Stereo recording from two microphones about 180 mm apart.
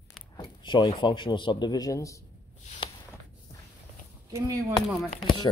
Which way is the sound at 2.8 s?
25° left (ahead or behind).